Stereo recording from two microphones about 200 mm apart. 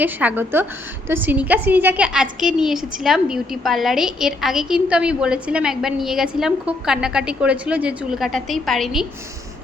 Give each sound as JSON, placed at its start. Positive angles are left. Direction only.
{"t": 0.0, "sound": "a woman's voice", "side_deg": -10}